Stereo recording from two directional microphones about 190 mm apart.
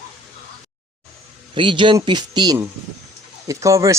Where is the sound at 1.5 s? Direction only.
25° right (ahead or behind).